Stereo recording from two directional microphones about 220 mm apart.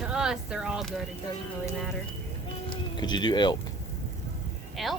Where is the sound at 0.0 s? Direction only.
5° right (ahead or behind).